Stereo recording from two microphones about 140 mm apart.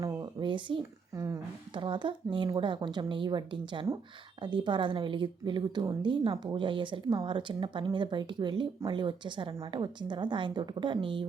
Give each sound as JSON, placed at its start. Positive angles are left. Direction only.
{"t": 0.0, "sound": "a sound", "side_deg": -30}
{"t": 0.8, "sound": "a woman's voice", "side_deg": -20}
{"t": 1.7, "sound": "speech", "side_deg": -35}